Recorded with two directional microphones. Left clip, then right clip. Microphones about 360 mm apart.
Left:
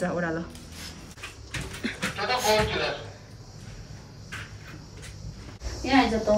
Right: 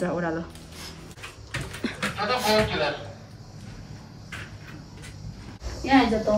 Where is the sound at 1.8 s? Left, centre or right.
Centre.